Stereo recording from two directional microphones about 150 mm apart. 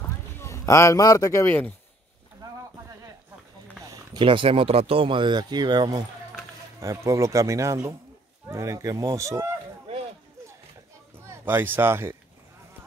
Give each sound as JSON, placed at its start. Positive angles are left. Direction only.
{"t": 0.4, "sound": "a man's voice", "side_deg": 20}
{"t": 2.4, "sound": "a sound", "side_deg": -25}
{"t": 3.8, "sound": "speech", "side_deg": -25}
{"t": 11.2, "sound": "speech", "side_deg": -15}